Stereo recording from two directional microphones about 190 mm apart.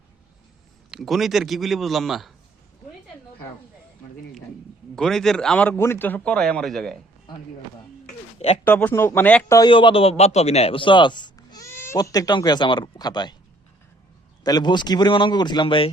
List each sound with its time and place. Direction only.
0.9 s speech: centre (ahead or behind)
4.9 s speech: centre (ahead or behind)
8.6 s speech: 10° left (ahead or behind)
9.6 s a man's voice: 25° left (ahead or behind)
14.4 s a man's voice: 20° left (ahead or behind)